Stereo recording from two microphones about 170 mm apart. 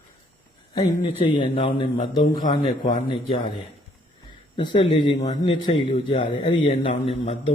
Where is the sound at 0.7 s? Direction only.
30° left (ahead or behind).